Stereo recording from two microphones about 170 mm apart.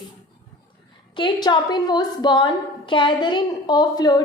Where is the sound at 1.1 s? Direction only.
25° left (ahead or behind).